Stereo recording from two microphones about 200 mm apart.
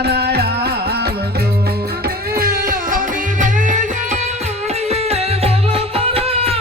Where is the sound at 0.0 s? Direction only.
55° right (ahead or behind).